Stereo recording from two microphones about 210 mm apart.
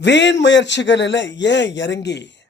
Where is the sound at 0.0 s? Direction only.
55° left (ahead or behind).